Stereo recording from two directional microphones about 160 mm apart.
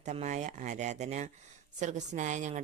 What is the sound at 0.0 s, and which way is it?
A woman's voice, 50° right (ahead or behind).